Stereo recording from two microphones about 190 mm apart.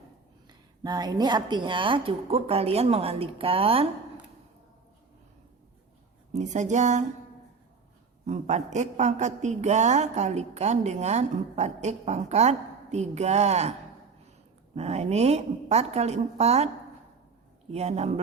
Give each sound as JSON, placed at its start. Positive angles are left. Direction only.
{"t": 0.8, "sound": "a woman's voice", "side_deg": -20}
{"t": 6.3, "sound": "a woman's voice", "side_deg": -40}
{"t": 8.3, "sound": "a woman's voice", "side_deg": -40}
{"t": 14.8, "sound": "a woman's voice", "side_deg": -35}
{"t": 17.7, "sound": "a woman's voice", "side_deg": -35}